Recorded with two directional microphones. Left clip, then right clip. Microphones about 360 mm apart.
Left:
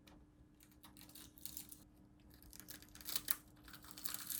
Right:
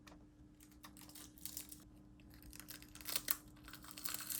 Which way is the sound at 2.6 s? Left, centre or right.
Centre.